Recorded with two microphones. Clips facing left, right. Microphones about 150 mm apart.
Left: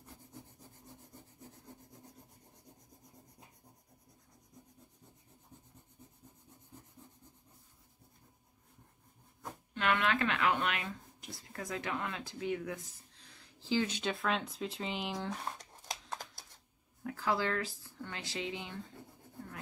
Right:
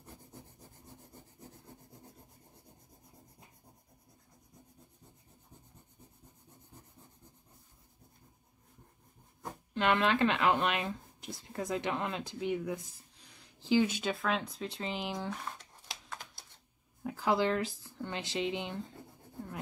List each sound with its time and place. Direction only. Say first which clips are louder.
9.8 s speech: right 4 dB; 25° right (ahead or behind); by 15.3 s centre (ahead or behind)
15.9 s a sound: left 3 dB; 40° left (ahead or behind)
17.0 s speech: right 4 dB; 20° right (ahead or behind)